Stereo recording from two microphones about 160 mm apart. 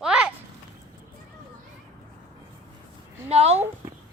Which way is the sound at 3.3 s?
40° right (ahead or behind).